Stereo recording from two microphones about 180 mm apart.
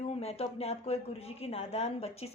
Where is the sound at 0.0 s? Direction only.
35° left (ahead or behind).